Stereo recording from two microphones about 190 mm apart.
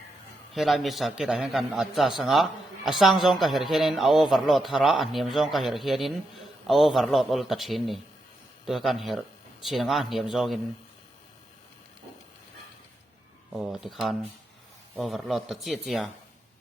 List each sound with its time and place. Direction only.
0.5 s a man's voice: centre (ahead or behind)
13.5 s a man's voice: 5° right (ahead or behind)